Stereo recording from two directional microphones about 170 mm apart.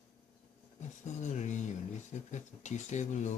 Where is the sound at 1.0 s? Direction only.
45° left (ahead or behind).